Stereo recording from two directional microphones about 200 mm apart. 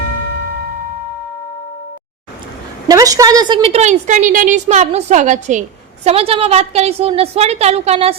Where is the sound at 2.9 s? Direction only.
15° right (ahead or behind).